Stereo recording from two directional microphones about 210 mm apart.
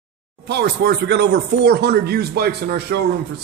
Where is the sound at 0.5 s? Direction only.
50° right (ahead or behind).